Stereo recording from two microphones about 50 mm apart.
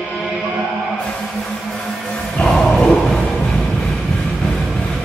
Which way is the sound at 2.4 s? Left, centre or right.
Centre.